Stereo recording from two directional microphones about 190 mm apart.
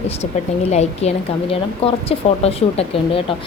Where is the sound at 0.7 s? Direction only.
35° left (ahead or behind).